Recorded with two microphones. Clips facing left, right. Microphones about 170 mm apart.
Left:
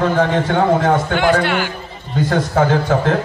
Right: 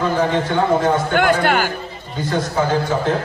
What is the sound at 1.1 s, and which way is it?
Speech, 50° right (ahead or behind).